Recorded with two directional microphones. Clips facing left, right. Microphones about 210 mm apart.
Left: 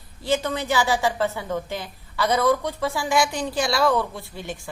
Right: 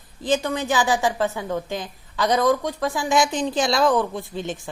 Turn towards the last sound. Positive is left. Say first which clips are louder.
# right 5 dB
turn(degrees=-20)  # may be behind; listen again after turning